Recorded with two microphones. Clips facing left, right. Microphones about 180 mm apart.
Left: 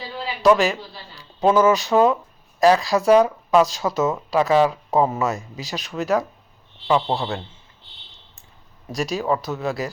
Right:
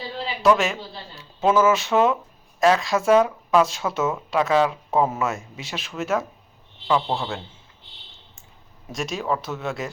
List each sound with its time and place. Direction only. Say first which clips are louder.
0.5 s a man's voice: left 4 dB; centre (ahead or behind)
5.3 s speech: left 3 dB; 35° left (ahead or behind)
5.7 s speech: left 3 dB; centre (ahead or behind)
8.9 s speech: left 3 dB; centre (ahead or behind)